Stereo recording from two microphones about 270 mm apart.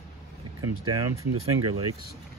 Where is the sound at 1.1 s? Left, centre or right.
Right.